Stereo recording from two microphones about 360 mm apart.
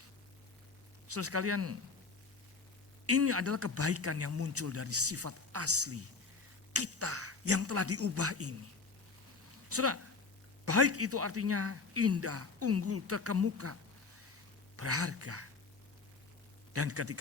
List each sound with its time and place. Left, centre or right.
1.0 s speech: right
3.1 s speech: right
9.6 s speech: right
14.8 s speech: right
16.7 s speech: right